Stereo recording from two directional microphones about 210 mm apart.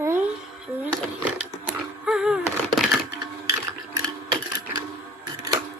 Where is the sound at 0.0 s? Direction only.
10° right (ahead or behind).